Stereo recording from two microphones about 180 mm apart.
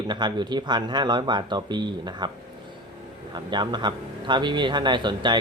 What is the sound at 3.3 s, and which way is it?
Speech, 25° right (ahead or behind).